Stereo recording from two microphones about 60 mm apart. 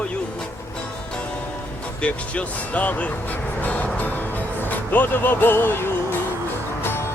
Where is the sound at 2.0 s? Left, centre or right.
Left.